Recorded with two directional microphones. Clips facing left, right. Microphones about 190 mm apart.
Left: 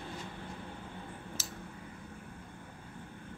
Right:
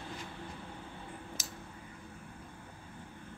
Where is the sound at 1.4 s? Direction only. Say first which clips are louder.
Left 2 dB; 15° right (ahead or behind).